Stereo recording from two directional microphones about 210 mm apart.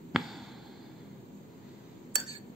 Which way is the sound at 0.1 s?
Centre (ahead or behind).